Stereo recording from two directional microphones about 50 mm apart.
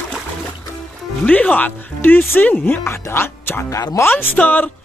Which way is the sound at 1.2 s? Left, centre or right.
Left.